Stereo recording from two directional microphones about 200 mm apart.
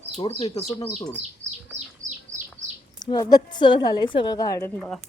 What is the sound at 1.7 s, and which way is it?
Bird, 40° right (ahead or behind).